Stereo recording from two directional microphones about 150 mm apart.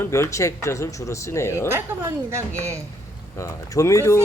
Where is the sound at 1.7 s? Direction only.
15° right (ahead or behind).